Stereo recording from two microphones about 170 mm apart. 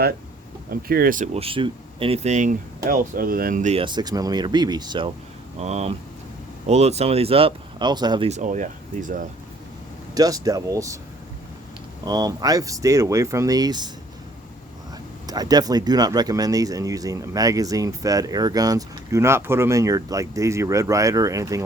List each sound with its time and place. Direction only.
0.7 s speech: 60° right (ahead or behind); by 3.8 s 45° right (ahead or behind)
3.8 s speech: 25° right (ahead or behind)
5.5 s speech: 40° right (ahead or behind)
8.3 s speech: 45° right (ahead or behind)
10.2 s speech: 20° right (ahead or behind)
12.0 s speech: 20° right (ahead or behind)
15.3 s speech: 25° right (ahead or behind)